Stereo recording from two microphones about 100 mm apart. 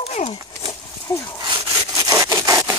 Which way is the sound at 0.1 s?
75° left (ahead or behind).